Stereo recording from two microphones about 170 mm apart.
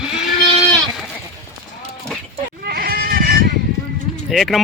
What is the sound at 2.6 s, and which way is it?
Goat, 65° right (ahead or behind).